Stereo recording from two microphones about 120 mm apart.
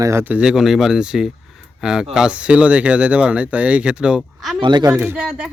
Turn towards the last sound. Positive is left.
turn(degrees=-10)  # may be behind; listen again after turning